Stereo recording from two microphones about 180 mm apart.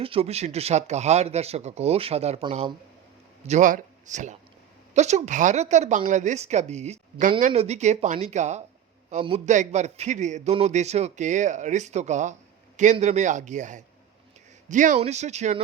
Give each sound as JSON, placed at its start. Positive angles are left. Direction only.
{"t": 0.0, "sound": "a man's voice", "side_deg": -30}
{"t": 3.4, "sound": "a man's voice", "side_deg": -45}